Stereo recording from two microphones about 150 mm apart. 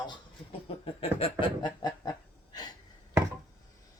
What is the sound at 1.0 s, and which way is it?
Speech, 35° left (ahead or behind).